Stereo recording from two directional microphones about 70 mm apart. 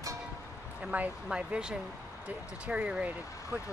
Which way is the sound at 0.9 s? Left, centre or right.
Centre.